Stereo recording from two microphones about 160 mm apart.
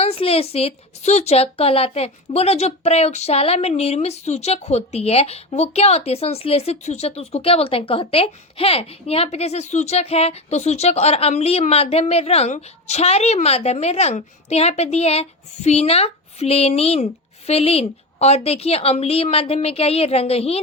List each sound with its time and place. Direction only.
0.0 s a woman's voice: 40° left (ahead or behind)